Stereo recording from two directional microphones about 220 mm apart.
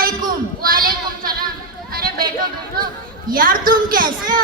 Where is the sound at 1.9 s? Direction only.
40° right (ahead or behind).